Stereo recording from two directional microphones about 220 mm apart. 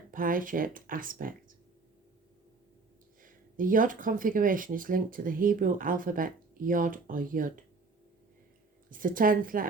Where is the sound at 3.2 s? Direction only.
40° right (ahead or behind).